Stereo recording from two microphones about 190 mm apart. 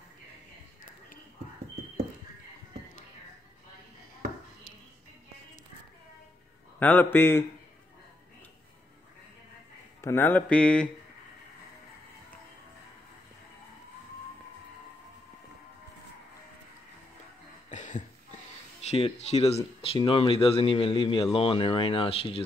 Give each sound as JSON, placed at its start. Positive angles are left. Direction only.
{"t": 6.8, "sound": "mantra", "side_deg": 10}
{"t": 10.0, "sound": "mantra", "side_deg": 10}
{"t": 17.6, "sound": "a sound", "side_deg": 40}
{"t": 18.8, "sound": "speech", "side_deg": 35}